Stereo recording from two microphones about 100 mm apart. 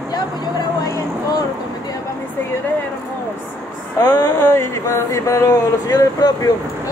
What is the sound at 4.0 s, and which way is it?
Speech, 35° left (ahead or behind).